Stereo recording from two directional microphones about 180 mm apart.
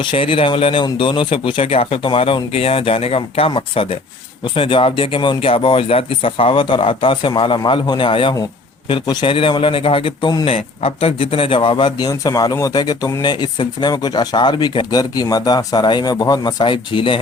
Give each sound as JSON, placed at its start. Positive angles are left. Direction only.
{"t": 0.0, "sound": "speech", "side_deg": 30}